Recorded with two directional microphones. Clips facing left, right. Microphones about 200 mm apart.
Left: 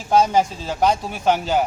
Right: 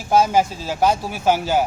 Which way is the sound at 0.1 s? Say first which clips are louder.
Even; 5° right (ahead or behind).